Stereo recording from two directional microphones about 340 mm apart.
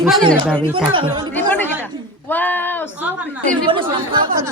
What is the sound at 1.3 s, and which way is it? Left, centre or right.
Speech, centre.